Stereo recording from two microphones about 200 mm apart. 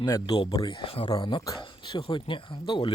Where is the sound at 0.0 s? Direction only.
20° left (ahead or behind).